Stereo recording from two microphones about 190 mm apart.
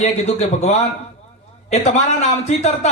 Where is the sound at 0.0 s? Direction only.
35° left (ahead or behind).